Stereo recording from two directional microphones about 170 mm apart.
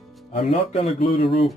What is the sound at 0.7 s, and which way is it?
Speech, 35° left (ahead or behind).